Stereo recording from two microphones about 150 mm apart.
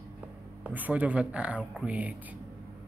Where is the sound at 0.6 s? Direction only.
10° right (ahead or behind).